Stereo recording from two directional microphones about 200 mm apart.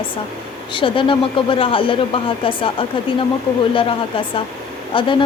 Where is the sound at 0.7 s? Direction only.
25° left (ahead or behind).